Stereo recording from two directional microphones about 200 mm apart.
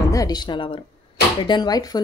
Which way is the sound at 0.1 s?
20° left (ahead or behind).